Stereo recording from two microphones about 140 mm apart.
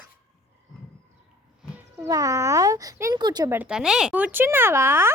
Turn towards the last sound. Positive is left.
turn(degrees=-20)  # may be behind; listen again after turning